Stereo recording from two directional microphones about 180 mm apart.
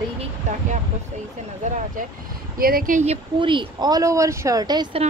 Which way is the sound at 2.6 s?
55° right (ahead or behind).